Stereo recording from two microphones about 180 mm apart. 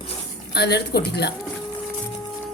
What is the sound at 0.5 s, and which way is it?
Speech, 65° left (ahead or behind).